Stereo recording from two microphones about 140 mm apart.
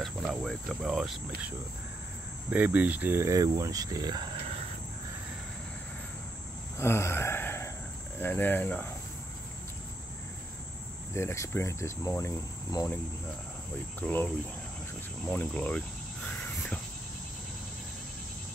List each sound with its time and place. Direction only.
0.0 s speech: centre (ahead or behind)
2.5 s speech: 10° right (ahead or behind); by 4.3 s 30° right (ahead or behind)
6.8 s a sound: 20° left (ahead or behind)
8.2 s speech: 15° left (ahead or behind)
11.1 s speech: 20° left (ahead or behind)
14.0 s speech: 10° left (ahead or behind)
15.2 s cricket: 10° left (ahead or behind)